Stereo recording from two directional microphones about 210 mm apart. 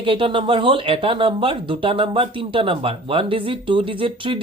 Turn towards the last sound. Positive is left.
turn(degrees=-25)  # may be behind; listen again after turning